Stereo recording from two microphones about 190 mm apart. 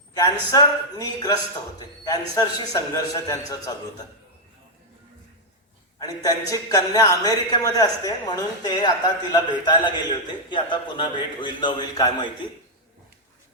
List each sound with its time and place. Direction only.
0.1 s a woman's voice: 20° left (ahead or behind)
6.0 s a woman's voice: 20° left (ahead or behind)